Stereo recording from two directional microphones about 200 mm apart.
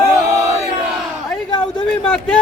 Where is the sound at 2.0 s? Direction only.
5° left (ahead or behind).